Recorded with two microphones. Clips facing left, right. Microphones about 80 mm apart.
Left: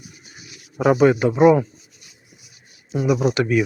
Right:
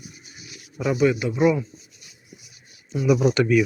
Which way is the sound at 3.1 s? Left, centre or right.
Centre.